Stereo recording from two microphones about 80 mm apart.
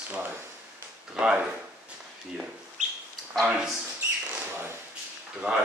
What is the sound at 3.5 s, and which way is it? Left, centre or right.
Speech, centre.